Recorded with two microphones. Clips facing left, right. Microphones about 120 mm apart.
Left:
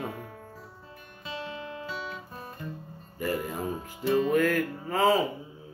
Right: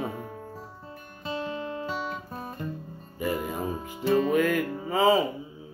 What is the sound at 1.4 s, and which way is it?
Music, 40° right (ahead or behind).